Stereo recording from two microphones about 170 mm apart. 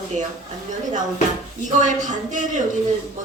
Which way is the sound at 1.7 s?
50° right (ahead or behind).